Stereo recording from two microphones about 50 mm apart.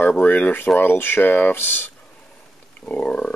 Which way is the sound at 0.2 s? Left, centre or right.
Left.